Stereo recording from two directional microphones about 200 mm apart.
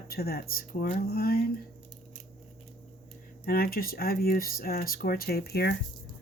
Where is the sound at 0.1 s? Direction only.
50° left (ahead or behind).